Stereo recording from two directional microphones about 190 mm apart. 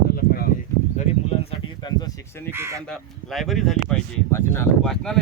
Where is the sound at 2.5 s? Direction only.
15° right (ahead or behind).